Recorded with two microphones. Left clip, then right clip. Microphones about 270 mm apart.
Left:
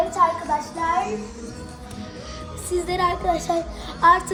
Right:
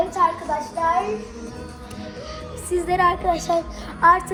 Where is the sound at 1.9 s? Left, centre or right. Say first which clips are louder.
Right 3 dB; centre.